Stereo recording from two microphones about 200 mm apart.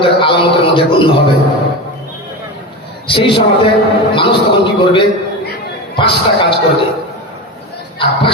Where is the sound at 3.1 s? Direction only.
25° left (ahead or behind).